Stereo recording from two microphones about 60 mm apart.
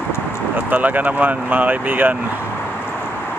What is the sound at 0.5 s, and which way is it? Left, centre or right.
Speech, right.